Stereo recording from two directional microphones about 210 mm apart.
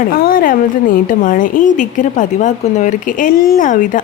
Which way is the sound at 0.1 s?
45° left (ahead or behind).